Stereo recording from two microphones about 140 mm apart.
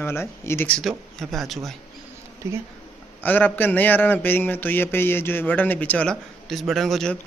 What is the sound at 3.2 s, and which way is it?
A man's voice, 15° left (ahead or behind).